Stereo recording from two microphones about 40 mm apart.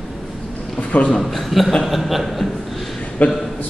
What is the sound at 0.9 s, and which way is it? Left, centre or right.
Speech, left.